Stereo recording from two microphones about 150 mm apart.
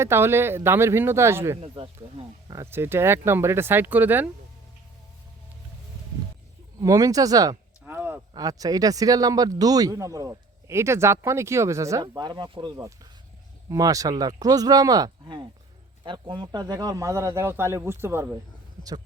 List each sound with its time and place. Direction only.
0.0 s speech: 15° right (ahead or behind)
1.6 s speech: 40° right (ahead or behind)
2.5 s speech: 20° right (ahead or behind)
6.8 s speech: 20° right (ahead or behind)
7.9 s a sound: 15° right (ahead or behind)
8.4 s speech: 25° right (ahead or behind)